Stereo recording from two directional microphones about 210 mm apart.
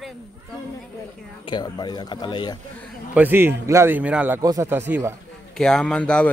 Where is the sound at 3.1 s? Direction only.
10° right (ahead or behind).